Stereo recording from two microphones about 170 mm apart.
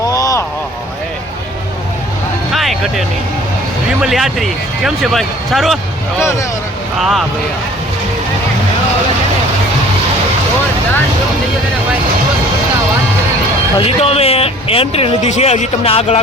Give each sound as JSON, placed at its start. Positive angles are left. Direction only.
{"t": 0.1, "sound": "vehicle", "side_deg": 20}
{"t": 2.5, "sound": "music", "side_deg": 0}
{"t": 4.0, "sound": "speech", "side_deg": 0}
{"t": 13.7, "sound": "speech", "side_deg": 35}